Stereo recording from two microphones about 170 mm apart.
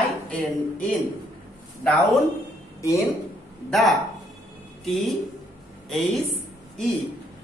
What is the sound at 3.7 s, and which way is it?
Speech, centre (ahead or behind).